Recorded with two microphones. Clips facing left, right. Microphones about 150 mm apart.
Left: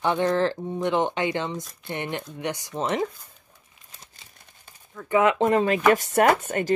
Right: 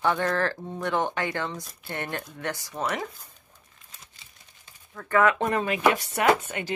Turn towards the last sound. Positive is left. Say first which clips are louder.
# left 3 dB
turn(degrees=45)  # may be behind; listen again after turning